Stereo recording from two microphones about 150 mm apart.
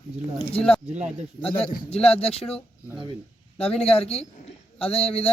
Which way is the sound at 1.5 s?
40° left (ahead or behind).